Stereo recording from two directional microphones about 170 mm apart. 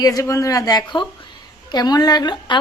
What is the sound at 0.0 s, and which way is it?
A woman's voice, 20° left (ahead or behind).